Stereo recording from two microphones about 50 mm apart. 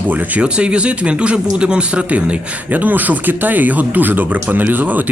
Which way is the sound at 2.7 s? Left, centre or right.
Right.